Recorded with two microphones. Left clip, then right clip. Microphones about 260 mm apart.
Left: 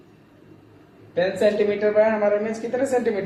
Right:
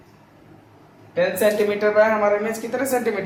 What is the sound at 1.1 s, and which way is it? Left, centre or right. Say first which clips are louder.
Speech: right 1 dB; centre.